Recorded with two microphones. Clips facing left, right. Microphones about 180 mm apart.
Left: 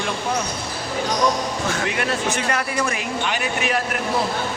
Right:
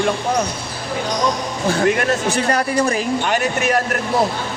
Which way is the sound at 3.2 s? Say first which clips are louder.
Right 5 dB; 45° right (ahead or behind).